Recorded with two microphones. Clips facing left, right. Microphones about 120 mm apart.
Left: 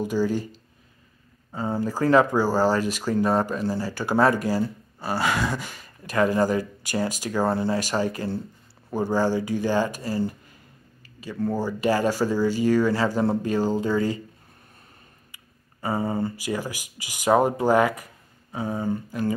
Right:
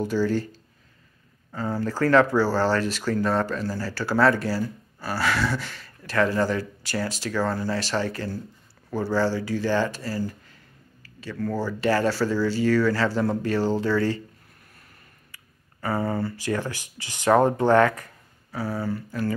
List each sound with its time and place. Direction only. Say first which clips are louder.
0.0 s speech: even; 15° left (ahead or behind)
11.0 s a sound: left 1 dB; 15° left (ahead or behind)
11.4 s speech: left 1 dB; 15° left (ahead or behind)
15.3 s speech: even; 20° left (ahead or behind)